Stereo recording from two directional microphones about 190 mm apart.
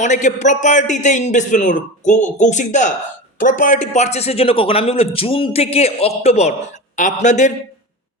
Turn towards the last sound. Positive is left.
turn(degrees=40)  # may be behind; listen again after turning